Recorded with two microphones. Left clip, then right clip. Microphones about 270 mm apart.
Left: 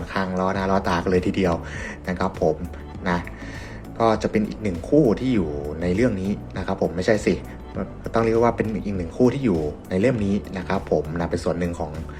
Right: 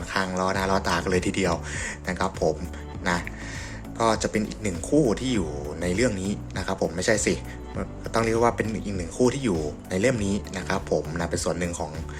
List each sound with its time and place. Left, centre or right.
0.1 s speech: centre
3.0 s music: centre
3.9 s a man's voice: centre